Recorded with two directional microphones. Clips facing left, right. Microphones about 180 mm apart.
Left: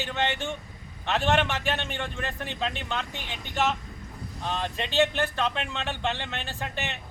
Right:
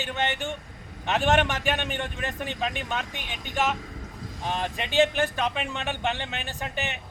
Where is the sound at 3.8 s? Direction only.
90° right.